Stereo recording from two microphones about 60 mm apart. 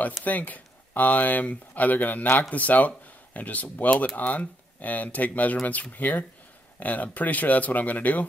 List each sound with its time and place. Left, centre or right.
0.2 s speech: left